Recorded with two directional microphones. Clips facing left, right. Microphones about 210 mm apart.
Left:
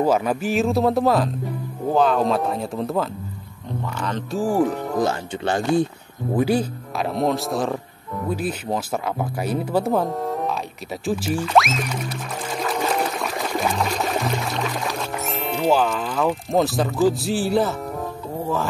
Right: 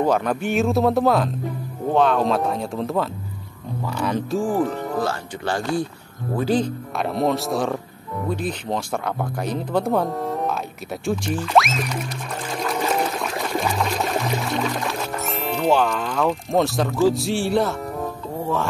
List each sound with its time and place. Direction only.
0.0 s speech: 5° left (ahead or behind)
4.4 s speech: 10° left (ahead or behind)
6.3 s speech: 10° left (ahead or behind)
12.5 s water: centre (ahead or behind)
18.4 s music: centre (ahead or behind)